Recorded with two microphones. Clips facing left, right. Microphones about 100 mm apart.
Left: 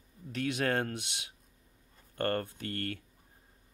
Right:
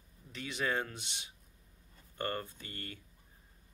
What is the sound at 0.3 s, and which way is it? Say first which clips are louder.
Speech: left 5 dB; 70° left (ahead or behind).